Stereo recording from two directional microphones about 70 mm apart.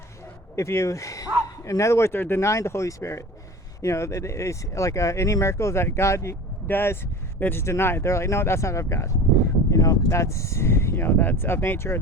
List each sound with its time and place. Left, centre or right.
0.5 s speech: left
6.7 s speech: left